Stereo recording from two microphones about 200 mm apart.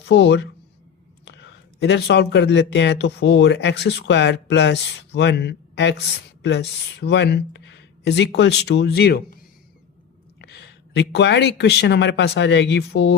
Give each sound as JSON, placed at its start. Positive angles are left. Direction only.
{"t": 0.1, "sound": "speech", "side_deg": 60}
{"t": 10.4, "sound": "speech", "side_deg": 55}